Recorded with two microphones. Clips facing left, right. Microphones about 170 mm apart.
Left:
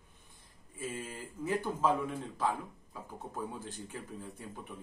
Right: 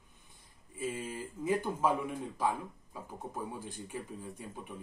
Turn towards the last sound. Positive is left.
turn(degrees=-15)  # may be behind; listen again after turning